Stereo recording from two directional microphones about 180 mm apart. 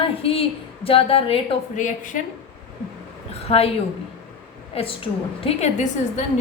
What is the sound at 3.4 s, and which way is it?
Speech, 35° left (ahead or behind).